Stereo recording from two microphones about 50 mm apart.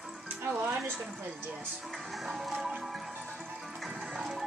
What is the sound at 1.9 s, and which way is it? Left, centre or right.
Music, centre.